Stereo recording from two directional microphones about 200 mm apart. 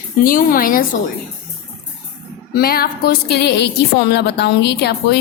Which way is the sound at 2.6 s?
50° left (ahead or behind).